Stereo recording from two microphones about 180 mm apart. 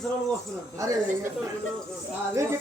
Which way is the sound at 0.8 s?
20° right (ahead or behind).